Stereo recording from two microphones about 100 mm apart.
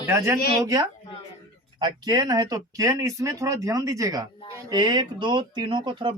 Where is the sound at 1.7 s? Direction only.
45° right (ahead or behind).